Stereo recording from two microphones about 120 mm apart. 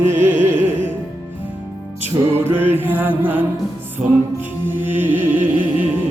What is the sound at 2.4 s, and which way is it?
Music, 20° right (ahead or behind).